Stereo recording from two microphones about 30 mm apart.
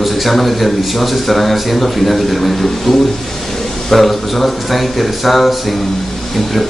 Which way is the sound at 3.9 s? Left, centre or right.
Centre.